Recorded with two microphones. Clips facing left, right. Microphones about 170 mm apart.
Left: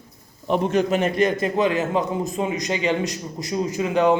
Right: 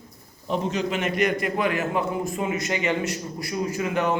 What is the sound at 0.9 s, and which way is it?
A man's voice, 35° left (ahead or behind).